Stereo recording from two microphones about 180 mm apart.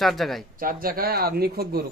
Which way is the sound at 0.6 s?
50° right (ahead or behind).